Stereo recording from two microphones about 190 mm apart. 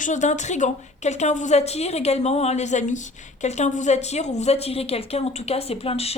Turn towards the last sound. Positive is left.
turn(degrees=30)  # may be behind; listen again after turning